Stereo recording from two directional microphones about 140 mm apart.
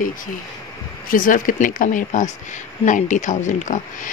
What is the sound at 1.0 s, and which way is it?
Speech, 80° left.